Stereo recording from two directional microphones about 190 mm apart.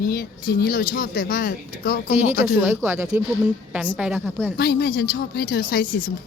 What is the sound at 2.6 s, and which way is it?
A woman's voice, 10° right (ahead or behind).